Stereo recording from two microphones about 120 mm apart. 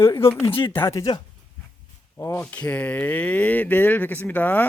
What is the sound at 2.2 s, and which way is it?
Speech, 15° left (ahead or behind).